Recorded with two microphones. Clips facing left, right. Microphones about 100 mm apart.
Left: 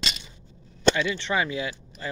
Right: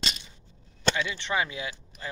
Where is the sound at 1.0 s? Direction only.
15° right (ahead or behind).